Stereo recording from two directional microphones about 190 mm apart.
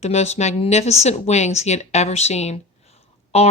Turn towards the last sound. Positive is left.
turn(degrees=30)  # may be behind; listen again after turning